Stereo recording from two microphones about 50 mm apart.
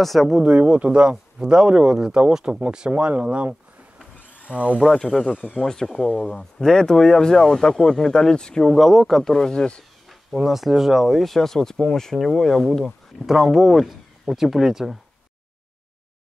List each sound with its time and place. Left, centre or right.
0.0 s speech: centre
0.4 s speech: right
2.9 s speech: right
4.5 s speech: right
4.9 s speech: centre
8.7 s speech: centre
9.3 s speech: centre
10.0 s speech: centre